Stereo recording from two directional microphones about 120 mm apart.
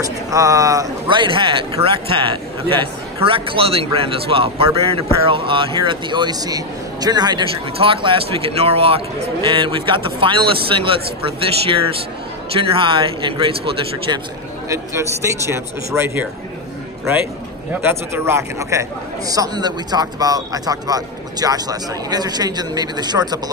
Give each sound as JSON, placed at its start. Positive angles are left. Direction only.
{"t": 0.0, "sound": "speech", "side_deg": -30}
{"t": 1.0, "sound": "speech", "side_deg": -45}
{"t": 7.5, "sound": "speech", "side_deg": -50}
{"t": 14.7, "sound": "speech", "side_deg": -25}
{"t": 17.8, "sound": "speech", "side_deg": -20}